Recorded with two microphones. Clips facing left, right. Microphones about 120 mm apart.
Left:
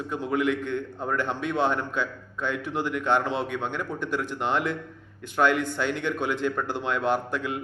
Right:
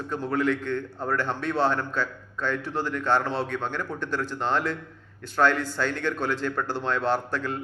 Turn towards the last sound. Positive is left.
turn(degrees=15)  # may be behind; listen again after turning